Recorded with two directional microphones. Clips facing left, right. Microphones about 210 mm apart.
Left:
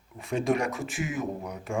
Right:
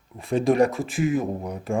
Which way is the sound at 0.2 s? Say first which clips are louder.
Right 7 dB; 35° right (ahead or behind).